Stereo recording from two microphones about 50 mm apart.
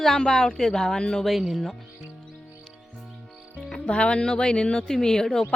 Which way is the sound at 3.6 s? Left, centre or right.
Centre.